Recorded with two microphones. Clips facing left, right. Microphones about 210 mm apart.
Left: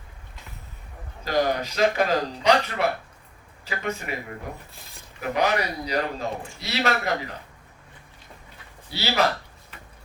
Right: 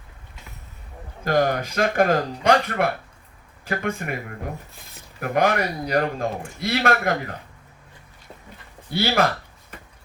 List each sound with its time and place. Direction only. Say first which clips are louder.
1.2 s a man's voice: right 3 dB; 50° right (ahead or behind)
5.2 s a man's voice: right 3 dB; 50° right (ahead or behind)
8.9 s a man's voice: right 4 dB; 50° right (ahead or behind)